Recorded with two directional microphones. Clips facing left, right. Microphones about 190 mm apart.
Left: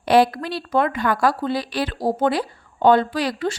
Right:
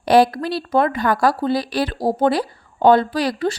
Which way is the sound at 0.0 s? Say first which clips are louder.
Right 2 dB; 40° right (ahead or behind).